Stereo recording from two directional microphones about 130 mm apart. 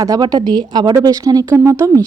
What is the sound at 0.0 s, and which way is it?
A woman's voice, 30° right (ahead or behind).